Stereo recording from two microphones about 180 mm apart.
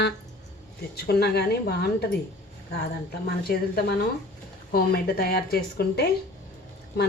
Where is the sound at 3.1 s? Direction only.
60° left (ahead or behind).